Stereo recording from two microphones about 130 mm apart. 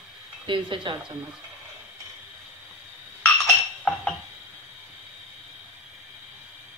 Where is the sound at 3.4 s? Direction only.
Centre (ahead or behind).